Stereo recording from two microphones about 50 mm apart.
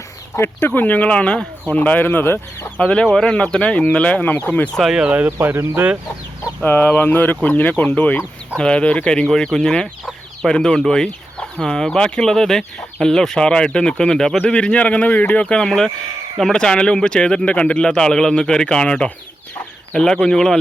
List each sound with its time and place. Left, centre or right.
0.6 s speech: left
2.2 s speech: left
2.7 s speech: centre
3.1 s speech: centre
3.3 s speech: left
5.4 s speech: right
6.7 s speech: left
8.5 s speech: centre